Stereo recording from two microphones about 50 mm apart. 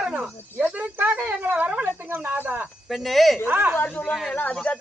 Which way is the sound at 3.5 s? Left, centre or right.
Right.